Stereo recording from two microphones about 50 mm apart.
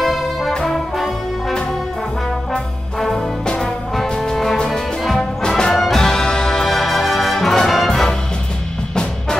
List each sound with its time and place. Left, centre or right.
0.0 s brass instrument: centre
3.0 s music: centre
3.4 s trombone: centre
4.2 s music: centre